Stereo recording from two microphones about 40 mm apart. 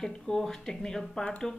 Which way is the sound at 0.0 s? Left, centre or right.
Centre.